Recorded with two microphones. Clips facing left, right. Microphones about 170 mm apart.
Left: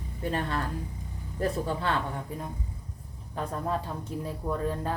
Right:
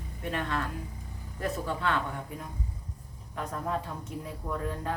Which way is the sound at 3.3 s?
35° left (ahead or behind).